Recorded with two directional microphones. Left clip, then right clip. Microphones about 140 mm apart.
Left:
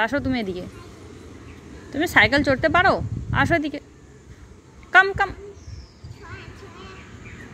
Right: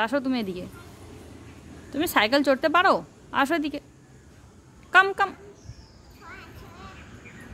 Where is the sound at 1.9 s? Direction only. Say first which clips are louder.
Left 5 dB; 20° right (ahead or behind).